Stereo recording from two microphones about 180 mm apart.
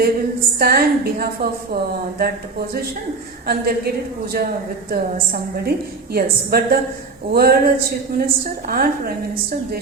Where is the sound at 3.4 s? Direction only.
60° right (ahead or behind).